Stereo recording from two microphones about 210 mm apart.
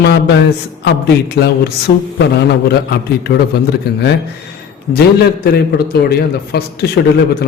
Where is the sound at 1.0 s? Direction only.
50° left (ahead or behind).